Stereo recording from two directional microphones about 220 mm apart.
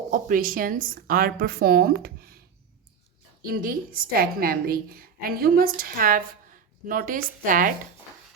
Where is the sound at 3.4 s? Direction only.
40° right (ahead or behind).